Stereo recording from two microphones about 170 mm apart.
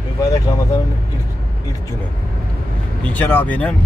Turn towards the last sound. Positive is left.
turn(degrees=10)  # may be behind; listen again after turning